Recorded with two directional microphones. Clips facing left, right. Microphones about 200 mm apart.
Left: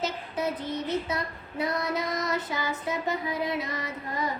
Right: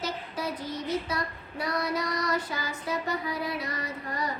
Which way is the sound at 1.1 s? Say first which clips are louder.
Left 1 dB; 20° left (ahead or behind).